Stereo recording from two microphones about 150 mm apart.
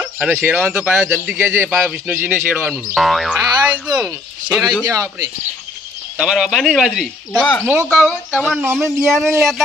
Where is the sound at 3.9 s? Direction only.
20° right (ahead or behind).